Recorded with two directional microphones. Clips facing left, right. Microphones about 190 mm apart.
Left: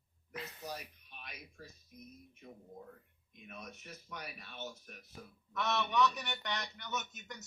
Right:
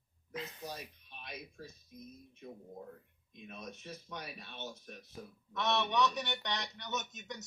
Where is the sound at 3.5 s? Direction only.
20° right (ahead or behind).